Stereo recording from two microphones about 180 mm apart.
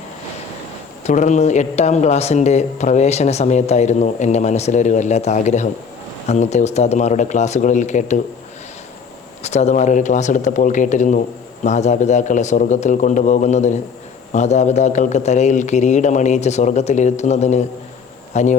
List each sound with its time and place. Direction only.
1.0 s a man's voice: 40° left (ahead or behind)
9.4 s a man's voice: 40° left (ahead or behind)